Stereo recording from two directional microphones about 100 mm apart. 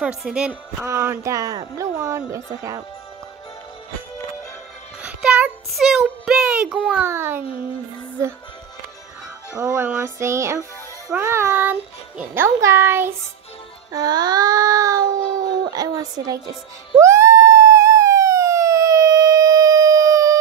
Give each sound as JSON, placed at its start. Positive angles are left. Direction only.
{"t": 0.0, "sound": "a child's voice", "side_deg": -10}
{"t": 0.7, "sound": "a child's voice", "side_deg": -25}
{"t": 5.0, "sound": "music", "side_deg": -10}
{"t": 5.7, "sound": "a child's voice", "side_deg": 0}
{"t": 7.1, "sound": "a child's voice", "side_deg": -25}
{"t": 9.6, "sound": "a child's voice", "side_deg": -20}
{"t": 10.1, "sound": "a child's voice", "side_deg": -30}
{"t": 13.9, "sound": "a sound", "side_deg": -45}
{"t": 17.0, "sound": "police car", "side_deg": -30}